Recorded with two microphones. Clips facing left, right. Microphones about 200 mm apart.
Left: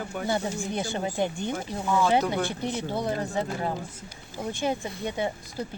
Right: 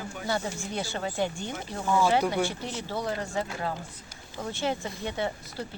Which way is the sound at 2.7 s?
55° left (ahead or behind).